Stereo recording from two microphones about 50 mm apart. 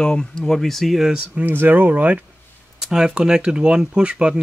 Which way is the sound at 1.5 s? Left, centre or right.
Right.